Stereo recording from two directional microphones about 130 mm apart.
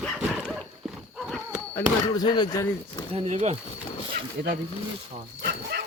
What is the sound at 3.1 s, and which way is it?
Speech, 55° right (ahead or behind).